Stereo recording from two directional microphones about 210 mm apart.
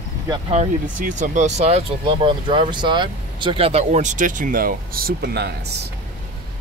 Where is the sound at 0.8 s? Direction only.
40° right (ahead or behind).